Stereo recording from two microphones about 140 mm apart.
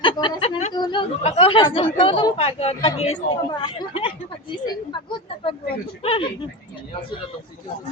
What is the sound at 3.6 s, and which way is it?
Speech, 35° left (ahead or behind).